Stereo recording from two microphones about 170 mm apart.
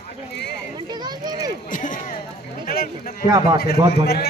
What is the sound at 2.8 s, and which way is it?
Speech, 55° left (ahead or behind).